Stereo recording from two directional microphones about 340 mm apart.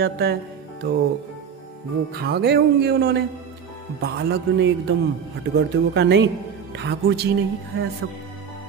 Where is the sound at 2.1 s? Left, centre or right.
Right.